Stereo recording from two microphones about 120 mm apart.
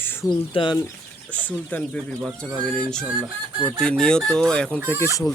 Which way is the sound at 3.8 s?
5° left (ahead or behind).